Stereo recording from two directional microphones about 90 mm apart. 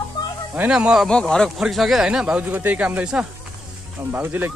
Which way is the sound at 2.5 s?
20° right (ahead or behind).